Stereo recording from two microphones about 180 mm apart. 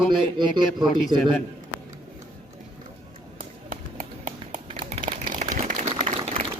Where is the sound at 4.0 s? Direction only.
45° right (ahead or behind).